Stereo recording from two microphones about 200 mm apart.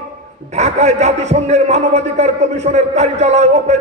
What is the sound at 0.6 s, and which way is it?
A man's voice, 35° right (ahead or behind).